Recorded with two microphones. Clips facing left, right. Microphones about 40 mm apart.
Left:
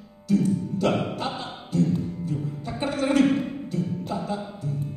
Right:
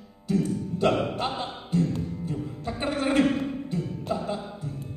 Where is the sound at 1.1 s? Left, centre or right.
Right.